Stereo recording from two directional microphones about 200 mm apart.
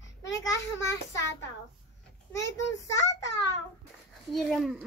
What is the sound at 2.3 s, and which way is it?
Speech, 15° left (ahead or behind).